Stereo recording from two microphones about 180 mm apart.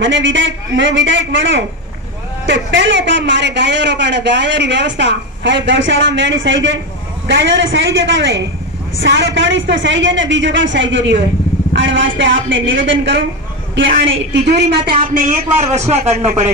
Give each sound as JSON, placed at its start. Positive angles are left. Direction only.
{"t": 0.0, "sound": "a woman's voice", "side_deg": -90}
{"t": 14.6, "sound": "a woman's voice", "side_deg": -30}
{"t": 15.1, "sound": "speech", "side_deg": -40}